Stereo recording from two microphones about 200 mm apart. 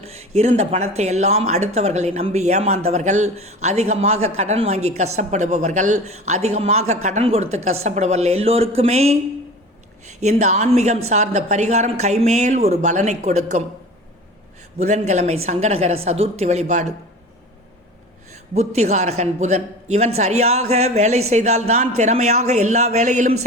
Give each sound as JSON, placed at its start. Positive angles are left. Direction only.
{"t": 0.0, "sound": "speech", "side_deg": -30}
{"t": 10.2, "sound": "speech", "side_deg": -35}
{"t": 14.8, "sound": "speech", "side_deg": -35}
{"t": 18.5, "sound": "speech", "side_deg": -35}